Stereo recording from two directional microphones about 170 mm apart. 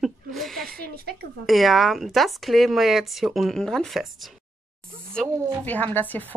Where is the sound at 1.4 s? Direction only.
Centre (ahead or behind).